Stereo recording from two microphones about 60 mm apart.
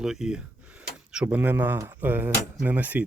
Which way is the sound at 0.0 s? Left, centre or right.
Centre.